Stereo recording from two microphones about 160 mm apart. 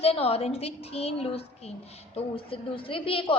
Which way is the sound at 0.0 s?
40° left (ahead or behind).